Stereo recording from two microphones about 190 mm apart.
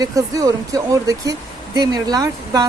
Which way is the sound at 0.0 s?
20° right (ahead or behind).